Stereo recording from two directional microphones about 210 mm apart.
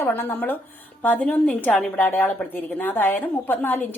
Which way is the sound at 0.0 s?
10° left (ahead or behind).